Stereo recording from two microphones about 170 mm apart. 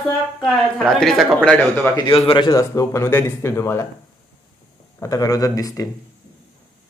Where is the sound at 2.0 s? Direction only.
30° left (ahead or behind).